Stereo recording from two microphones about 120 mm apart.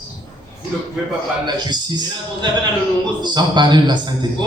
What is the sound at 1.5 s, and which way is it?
A man's voice, 40° right (ahead or behind).